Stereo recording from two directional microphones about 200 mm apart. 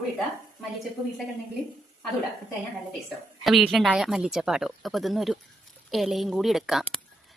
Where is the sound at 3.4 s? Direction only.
Centre (ahead or behind).